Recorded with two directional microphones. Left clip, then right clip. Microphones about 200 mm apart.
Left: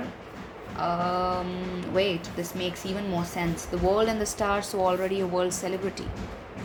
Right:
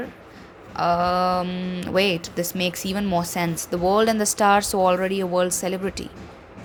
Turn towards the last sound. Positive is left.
turn(degrees=-45)  # may be behind; listen again after turning